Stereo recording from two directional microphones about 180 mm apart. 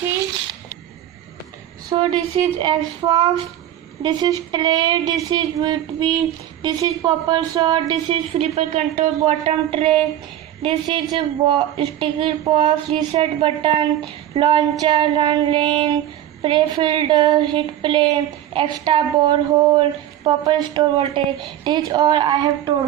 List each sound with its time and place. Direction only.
2.0 s speech: 25° right (ahead or behind)